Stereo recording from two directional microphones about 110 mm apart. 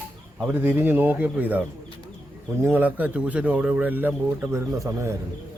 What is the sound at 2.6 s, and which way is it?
A man's voice, 15° right (ahead or behind).